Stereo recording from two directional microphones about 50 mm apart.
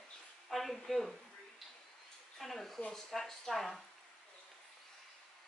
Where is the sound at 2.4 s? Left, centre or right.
Centre.